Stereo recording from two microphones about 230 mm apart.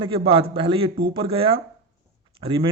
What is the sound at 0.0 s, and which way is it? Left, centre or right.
Speech, right.